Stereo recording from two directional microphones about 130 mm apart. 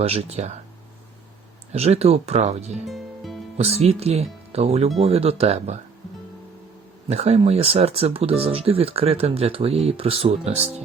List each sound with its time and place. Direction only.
0.0 s speech: 50° right (ahead or behind)
1.7 s speech: 50° right (ahead or behind)
2.8 s music: centre (ahead or behind)
3.6 s speech: 50° right (ahead or behind)
7.1 s speech: 55° right (ahead or behind)